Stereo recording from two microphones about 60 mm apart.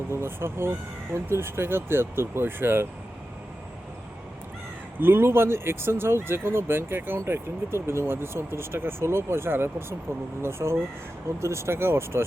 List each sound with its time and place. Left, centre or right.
0.1 s speech: right
4.9 s speech: right